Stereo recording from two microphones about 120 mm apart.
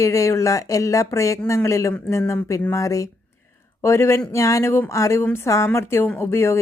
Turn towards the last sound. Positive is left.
turn(degrees=20)  # may be behind; listen again after turning